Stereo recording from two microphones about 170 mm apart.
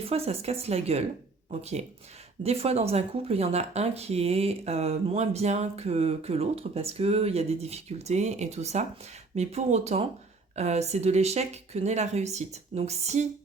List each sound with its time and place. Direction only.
0.1 s speech: 35° right (ahead or behind)